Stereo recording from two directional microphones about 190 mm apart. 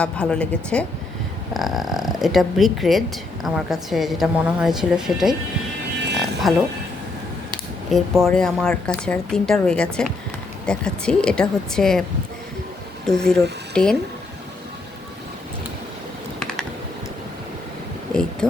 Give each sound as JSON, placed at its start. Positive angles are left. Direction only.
{"t": 0.0, "sound": "a woman's voice", "side_deg": 5}
{"t": 6.0, "sound": "livestock", "side_deg": -65}
{"t": 6.4, "sound": "a woman's voice", "side_deg": 0}
{"t": 7.9, "sound": "a woman's voice", "side_deg": 0}
{"t": 13.1, "sound": "speech", "side_deg": 5}
{"t": 16.4, "sound": "computer keyboard", "side_deg": 5}
{"t": 18.1, "sound": "a sound", "side_deg": 5}